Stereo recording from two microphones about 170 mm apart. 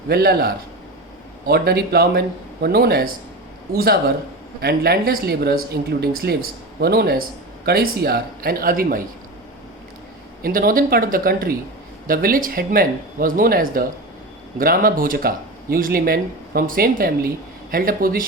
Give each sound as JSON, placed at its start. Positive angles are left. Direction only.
{"t": 0.1, "sound": "speech", "side_deg": -65}
{"t": 10.4, "sound": "speech", "side_deg": -60}